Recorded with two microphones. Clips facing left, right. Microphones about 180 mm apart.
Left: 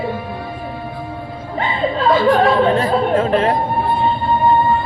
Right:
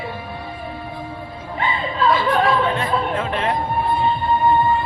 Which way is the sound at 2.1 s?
35° left (ahead or behind).